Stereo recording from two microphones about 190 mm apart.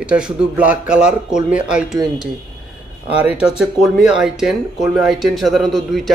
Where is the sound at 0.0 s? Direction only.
5° right (ahead or behind).